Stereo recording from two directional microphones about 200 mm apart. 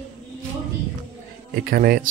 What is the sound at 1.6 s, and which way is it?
Speech, 50° right (ahead or behind).